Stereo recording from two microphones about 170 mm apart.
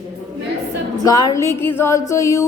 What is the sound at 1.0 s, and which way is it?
A woman's voice, 20° left (ahead or behind).